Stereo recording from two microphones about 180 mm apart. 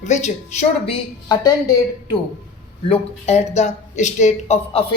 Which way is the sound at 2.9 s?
35° left (ahead or behind).